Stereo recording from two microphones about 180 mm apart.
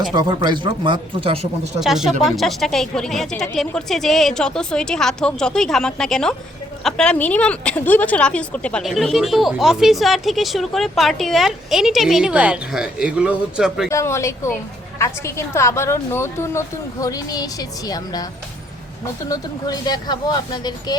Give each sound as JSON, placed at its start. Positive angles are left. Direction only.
{"t": 0.1, "sound": "speech", "side_deg": -25}
{"t": 1.8, "sound": "speech", "side_deg": 0}
{"t": 13.9, "sound": "a woman's voice", "side_deg": 15}
{"t": 19.3, "sound": "speech", "side_deg": 20}